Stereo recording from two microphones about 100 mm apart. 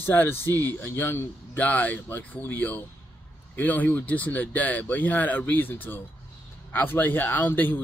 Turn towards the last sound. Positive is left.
turn(degrees=20)  # may be behind; listen again after turning